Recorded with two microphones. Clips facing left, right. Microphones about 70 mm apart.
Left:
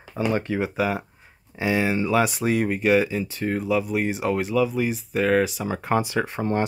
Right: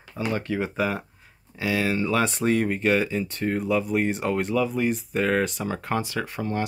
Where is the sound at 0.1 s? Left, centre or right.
Centre.